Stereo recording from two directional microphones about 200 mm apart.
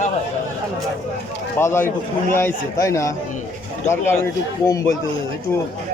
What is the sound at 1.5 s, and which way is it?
Speech, 10° left (ahead or behind).